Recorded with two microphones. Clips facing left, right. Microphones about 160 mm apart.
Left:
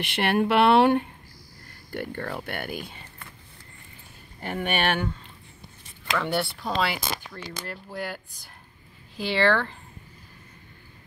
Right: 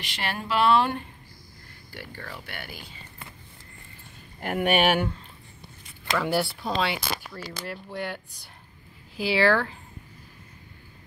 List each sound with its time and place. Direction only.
0.0 s speech: 60° left (ahead or behind)
4.4 s speech: 5° right (ahead or behind)